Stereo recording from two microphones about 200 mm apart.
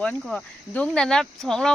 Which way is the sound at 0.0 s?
5° left (ahead or behind).